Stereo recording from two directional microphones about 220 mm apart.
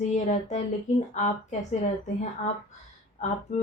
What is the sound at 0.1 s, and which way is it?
Speech, 35° left (ahead or behind).